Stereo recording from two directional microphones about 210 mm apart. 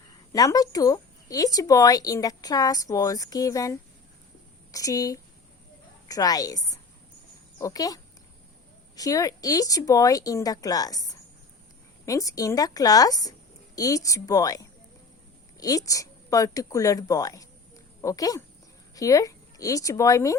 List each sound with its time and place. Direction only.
0.3 s a woman's voice: 15° left (ahead or behind)